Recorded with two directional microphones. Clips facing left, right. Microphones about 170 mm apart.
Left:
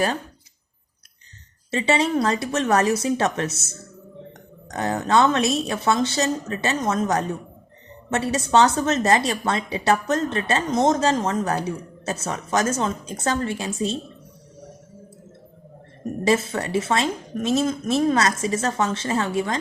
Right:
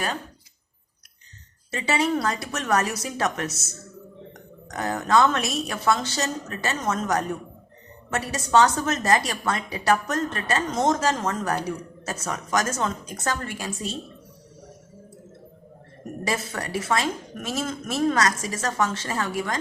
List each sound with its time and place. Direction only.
1.7 s a woman's voice: 25° left (ahead or behind)
4.7 s a woman's voice: 25° left (ahead or behind)
16.2 s a woman's voice: 25° left (ahead or behind)